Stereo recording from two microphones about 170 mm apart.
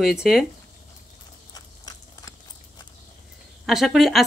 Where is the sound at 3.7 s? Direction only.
Centre (ahead or behind).